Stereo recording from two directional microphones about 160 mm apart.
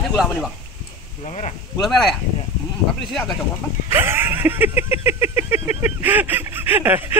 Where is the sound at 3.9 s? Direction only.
15° right (ahead or behind).